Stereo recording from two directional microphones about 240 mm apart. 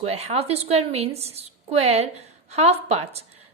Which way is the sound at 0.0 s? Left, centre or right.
Right.